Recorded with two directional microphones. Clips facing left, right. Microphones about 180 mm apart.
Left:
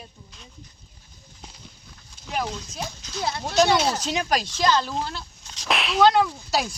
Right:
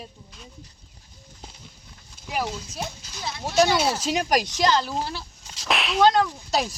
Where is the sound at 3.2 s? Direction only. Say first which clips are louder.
Left 6 dB; 60° left (ahead or behind).